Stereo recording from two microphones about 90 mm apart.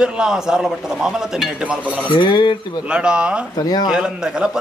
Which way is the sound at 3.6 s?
50° left (ahead or behind).